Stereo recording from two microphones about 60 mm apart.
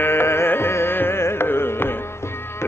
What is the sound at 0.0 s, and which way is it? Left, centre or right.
Carnatic music, left.